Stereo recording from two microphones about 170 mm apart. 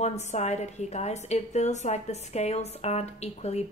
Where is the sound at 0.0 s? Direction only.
40° left (ahead or behind).